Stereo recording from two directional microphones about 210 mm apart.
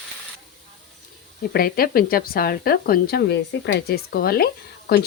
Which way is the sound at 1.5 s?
45° left (ahead or behind).